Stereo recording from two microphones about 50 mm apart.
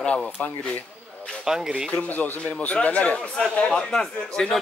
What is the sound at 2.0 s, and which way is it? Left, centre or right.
A man's voice, left.